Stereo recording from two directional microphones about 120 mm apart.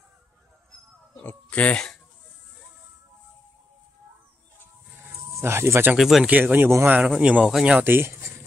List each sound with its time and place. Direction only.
1.1 s speech: 10° left (ahead or behind)
5.0 s music: 20° right (ahead or behind)
5.9 s speech: centre (ahead or behind)
6.3 s speech: 15° right (ahead or behind)